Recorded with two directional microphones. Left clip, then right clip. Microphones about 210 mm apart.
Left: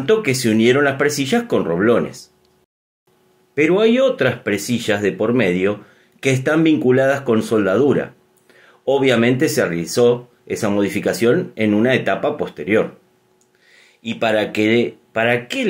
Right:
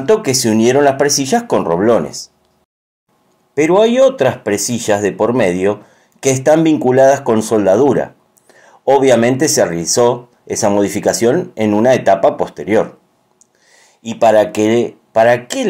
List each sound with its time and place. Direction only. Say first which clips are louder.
0.0 s speech: right 4 dB; 25° right (ahead or behind)
3.5 s speech: right 4 dB; 20° right (ahead or behind)
7.9 s a sound: right 4 dB; 20° right (ahead or behind)
9.6 s speech: right 4 dB; 20° right (ahead or behind)